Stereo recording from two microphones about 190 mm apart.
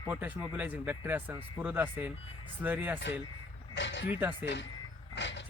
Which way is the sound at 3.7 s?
70° left (ahead or behind).